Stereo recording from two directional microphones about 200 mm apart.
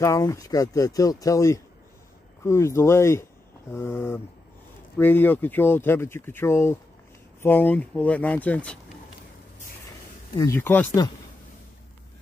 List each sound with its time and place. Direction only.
0.0 s speech: 15° left (ahead or behind)
10.3 s speech: 15° left (ahead or behind)